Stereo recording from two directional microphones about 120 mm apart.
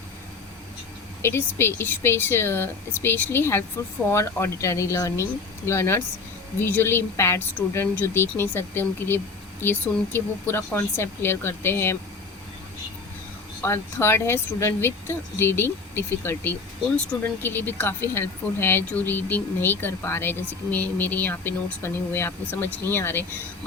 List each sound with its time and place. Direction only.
1.2 s a woman's voice: 20° left (ahead or behind)
13.6 s a woman's voice: 20° left (ahead or behind)